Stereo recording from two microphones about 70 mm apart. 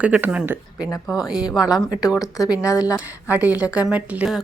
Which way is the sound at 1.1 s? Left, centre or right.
Centre.